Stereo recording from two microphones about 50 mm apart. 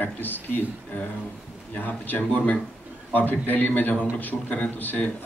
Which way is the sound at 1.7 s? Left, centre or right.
Left.